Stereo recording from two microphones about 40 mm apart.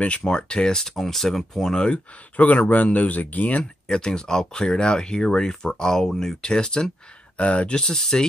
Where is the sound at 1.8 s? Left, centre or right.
Left.